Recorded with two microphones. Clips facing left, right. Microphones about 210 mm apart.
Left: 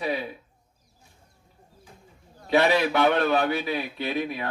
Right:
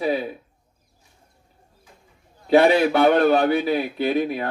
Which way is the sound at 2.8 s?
35° right (ahead or behind).